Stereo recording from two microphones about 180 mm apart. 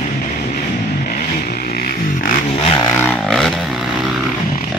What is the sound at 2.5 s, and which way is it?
Vehicle, 25° left (ahead or behind).